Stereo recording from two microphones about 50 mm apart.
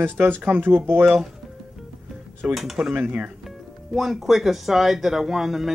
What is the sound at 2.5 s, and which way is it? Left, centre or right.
Speech, centre.